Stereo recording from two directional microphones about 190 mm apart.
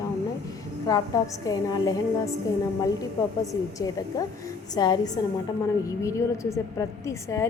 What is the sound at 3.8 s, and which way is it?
A woman's voice, 20° left (ahead or behind).